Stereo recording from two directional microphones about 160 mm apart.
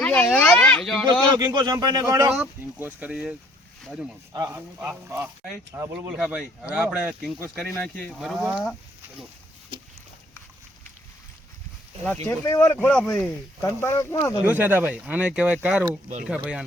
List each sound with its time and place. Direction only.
0.0 s speech: 5° left (ahead or behind)
1.4 s speech: 25° right (ahead or behind); by 4.1 s 5° right (ahead or behind)
4.3 s speech: 20° right (ahead or behind); by 8.7 s 5° right (ahead or behind)
12.0 s speech: 15° left (ahead or behind)
13.6 s speech: 15° left (ahead or behind)
14.4 s speech: 10° right (ahead or behind)